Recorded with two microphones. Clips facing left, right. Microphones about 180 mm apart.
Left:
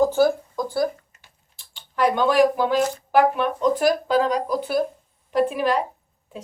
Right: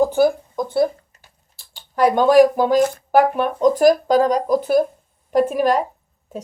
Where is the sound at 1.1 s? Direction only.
40° right (ahead or behind).